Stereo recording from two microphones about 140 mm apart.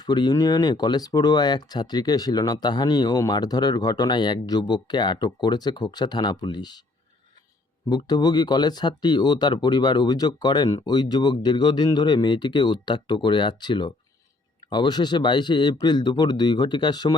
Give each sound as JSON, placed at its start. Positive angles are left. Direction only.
{"t": 0.0, "sound": "speech", "side_deg": 30}
{"t": 7.9, "sound": "speech", "side_deg": 30}